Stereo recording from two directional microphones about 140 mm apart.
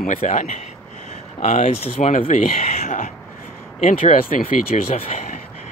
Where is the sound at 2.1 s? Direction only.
65° left (ahead or behind).